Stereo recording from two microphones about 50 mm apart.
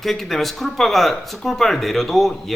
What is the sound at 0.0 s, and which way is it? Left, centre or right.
A man's voice, centre.